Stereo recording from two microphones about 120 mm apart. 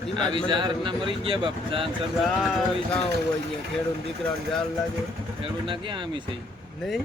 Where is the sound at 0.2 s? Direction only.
40° right (ahead or behind).